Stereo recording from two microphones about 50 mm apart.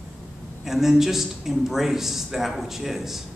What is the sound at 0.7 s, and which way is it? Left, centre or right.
A man's voice, centre.